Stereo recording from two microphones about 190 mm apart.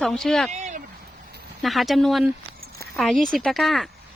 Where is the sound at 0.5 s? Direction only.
40° right (ahead or behind).